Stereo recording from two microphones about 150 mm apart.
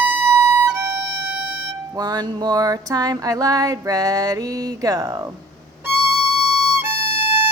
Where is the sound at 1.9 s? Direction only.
30° right (ahead or behind).